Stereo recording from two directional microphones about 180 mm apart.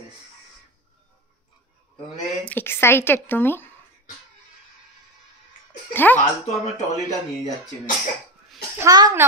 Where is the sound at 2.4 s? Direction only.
10° left (ahead or behind).